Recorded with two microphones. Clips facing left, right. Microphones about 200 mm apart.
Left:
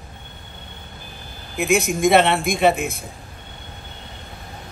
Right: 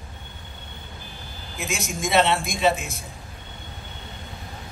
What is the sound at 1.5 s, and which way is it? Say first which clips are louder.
A man's voice: left 11 dB; 60° left (ahead or behind).